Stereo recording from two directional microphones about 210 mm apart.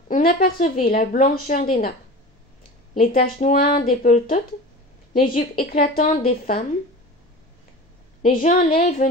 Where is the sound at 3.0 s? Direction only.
40° left (ahead or behind).